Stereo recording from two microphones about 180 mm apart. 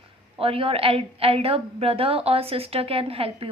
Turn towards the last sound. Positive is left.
turn(degrees=-30)  # may be behind; listen again after turning